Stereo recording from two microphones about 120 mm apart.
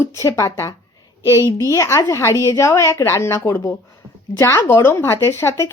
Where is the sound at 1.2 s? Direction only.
20° right (ahead or behind).